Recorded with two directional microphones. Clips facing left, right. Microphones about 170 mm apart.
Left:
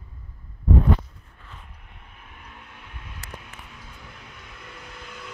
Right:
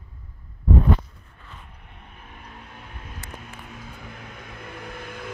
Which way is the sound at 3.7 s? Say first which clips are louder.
Right 5 dB; 55° right (ahead or behind).